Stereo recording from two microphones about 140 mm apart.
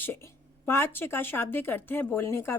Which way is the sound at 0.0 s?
15° left (ahead or behind).